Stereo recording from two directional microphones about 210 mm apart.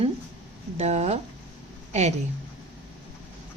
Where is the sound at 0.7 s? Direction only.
30° right (ahead or behind).